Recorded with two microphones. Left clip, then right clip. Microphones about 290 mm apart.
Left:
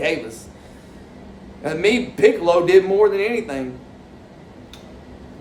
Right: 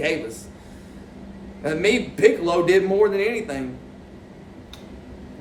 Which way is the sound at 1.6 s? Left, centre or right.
Centre.